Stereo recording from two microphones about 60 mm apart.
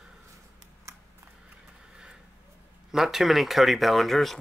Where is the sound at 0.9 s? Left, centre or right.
Right.